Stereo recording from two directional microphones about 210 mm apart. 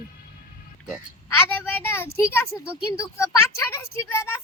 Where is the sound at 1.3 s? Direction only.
10° left (ahead or behind).